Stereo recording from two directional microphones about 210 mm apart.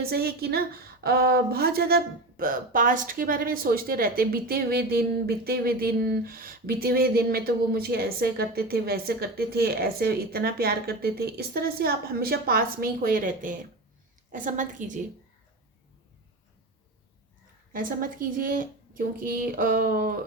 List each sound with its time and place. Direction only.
0.0 s a child's voice: 45° right (ahead or behind)
17.7 s a child's voice: 40° right (ahead or behind)